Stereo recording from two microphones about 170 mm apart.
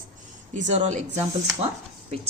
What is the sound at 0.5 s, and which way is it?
Speech, 45° right (ahead or behind).